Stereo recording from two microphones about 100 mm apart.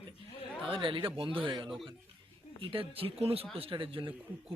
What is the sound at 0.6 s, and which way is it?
Speech, 60° right (ahead or behind).